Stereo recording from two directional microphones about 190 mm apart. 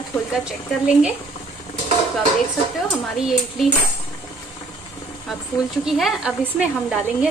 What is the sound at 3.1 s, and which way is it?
Speech, 5° right (ahead or behind).